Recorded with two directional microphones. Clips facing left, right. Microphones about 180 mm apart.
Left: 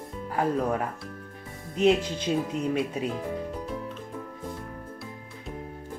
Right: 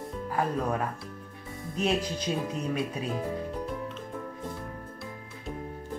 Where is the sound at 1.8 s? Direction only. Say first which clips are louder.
Left 6 dB; 25° left (ahead or behind).